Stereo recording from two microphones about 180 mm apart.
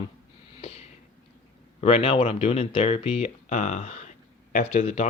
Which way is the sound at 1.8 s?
35° left (ahead or behind).